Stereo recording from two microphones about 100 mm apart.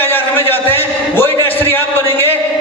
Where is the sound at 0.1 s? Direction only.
20° left (ahead or behind).